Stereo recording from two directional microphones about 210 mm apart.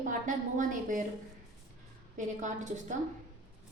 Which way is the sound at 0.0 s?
40° right (ahead or behind).